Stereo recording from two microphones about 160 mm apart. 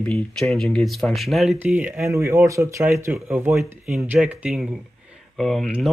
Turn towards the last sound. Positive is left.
turn(degrees=0)  # may be behind; listen again after turning